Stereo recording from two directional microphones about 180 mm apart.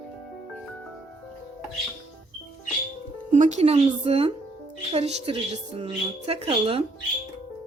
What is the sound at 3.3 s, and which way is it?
A woman's voice, 40° right (ahead or behind).